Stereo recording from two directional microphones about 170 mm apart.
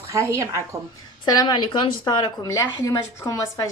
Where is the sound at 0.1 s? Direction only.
15° right (ahead or behind).